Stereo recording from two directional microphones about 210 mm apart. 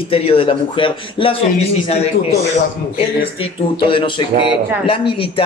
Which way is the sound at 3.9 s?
25° left (ahead or behind).